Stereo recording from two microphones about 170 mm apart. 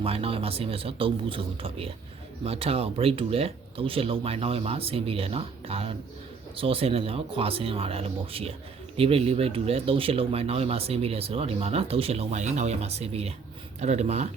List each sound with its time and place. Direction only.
0.0 s speech: 35° right (ahead or behind)